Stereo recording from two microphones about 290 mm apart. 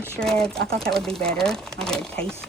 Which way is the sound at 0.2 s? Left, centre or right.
Centre.